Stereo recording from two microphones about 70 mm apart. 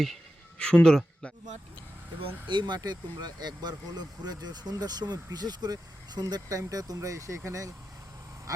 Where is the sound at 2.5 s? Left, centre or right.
Right.